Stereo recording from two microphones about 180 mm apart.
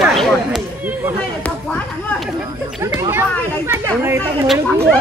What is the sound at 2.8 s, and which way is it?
Speech, 15° right (ahead or behind).